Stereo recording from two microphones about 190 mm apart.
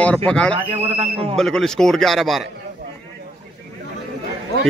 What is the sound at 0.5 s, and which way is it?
Speech, 35° right (ahead or behind).